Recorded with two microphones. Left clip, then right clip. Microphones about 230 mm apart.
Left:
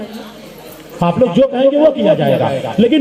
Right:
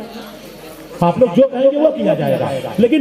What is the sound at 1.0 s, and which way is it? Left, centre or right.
A man's voice, left.